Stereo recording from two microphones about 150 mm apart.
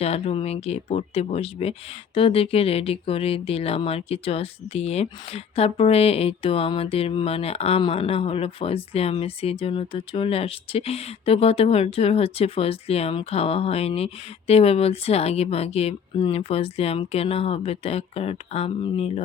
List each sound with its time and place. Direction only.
0.0 s speech: 45° left (ahead or behind)